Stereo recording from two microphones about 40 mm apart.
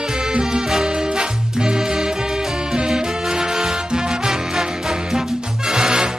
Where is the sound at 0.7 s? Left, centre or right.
Centre.